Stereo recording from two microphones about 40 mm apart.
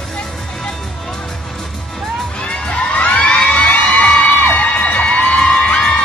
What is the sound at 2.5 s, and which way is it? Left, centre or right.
Children shouting, left.